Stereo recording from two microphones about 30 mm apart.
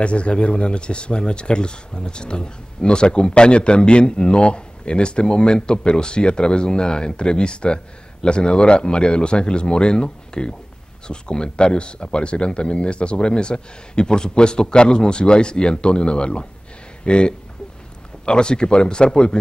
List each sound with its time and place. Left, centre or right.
0.0 s speech: left